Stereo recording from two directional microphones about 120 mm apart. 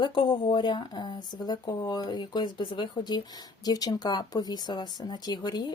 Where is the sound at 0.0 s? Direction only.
40° left (ahead or behind).